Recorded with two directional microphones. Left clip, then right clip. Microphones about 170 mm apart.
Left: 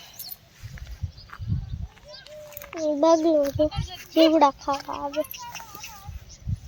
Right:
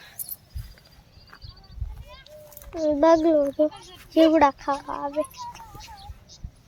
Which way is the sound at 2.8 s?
10° right (ahead or behind).